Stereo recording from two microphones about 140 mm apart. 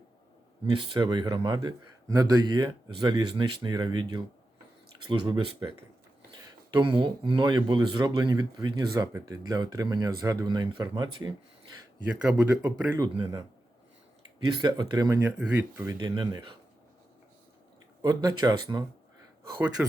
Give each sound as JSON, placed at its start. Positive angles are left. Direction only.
{"t": 0.7, "sound": "a man's voice", "side_deg": -35}
{"t": 6.7, "sound": "speech", "side_deg": -35}
{"t": 12.2, "sound": "speech", "side_deg": -10}
{"t": 14.3, "sound": "speech", "side_deg": -30}
{"t": 15.2, "sound": "speech", "side_deg": -10}
{"t": 16.0, "sound": "a man's voice", "side_deg": -30}
{"t": 18.0, "sound": "speech", "side_deg": -25}
{"t": 19.8, "sound": "speech", "side_deg": -10}